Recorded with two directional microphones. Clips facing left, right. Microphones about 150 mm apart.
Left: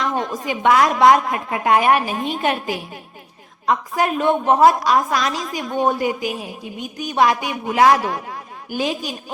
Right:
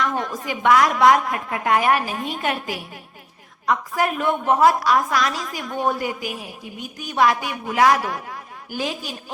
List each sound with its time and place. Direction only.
0.0 s a woman's voice: 25° left (ahead or behind)